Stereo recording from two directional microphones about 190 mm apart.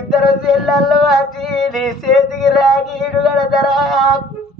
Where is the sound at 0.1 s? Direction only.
Centre (ahead or behind).